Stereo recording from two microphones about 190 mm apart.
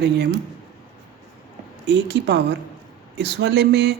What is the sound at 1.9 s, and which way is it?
Speech, 65° right (ahead or behind).